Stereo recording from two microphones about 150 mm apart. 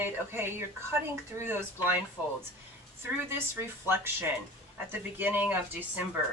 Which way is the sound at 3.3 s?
15° right (ahead or behind).